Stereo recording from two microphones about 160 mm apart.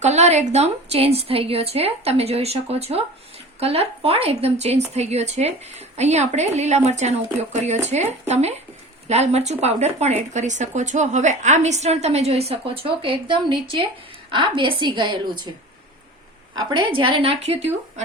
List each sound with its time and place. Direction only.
0.0 s a woman's voice: 45° right (ahead or behind)
16.6 s a woman's voice: 25° right (ahead or behind)